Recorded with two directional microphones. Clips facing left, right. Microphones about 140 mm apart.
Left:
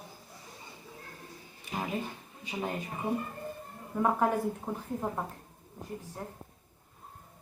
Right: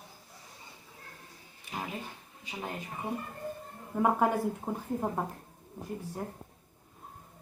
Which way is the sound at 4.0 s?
10° right (ahead or behind).